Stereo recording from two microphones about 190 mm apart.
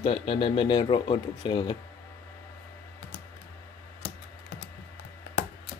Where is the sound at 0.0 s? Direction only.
30° left (ahead or behind).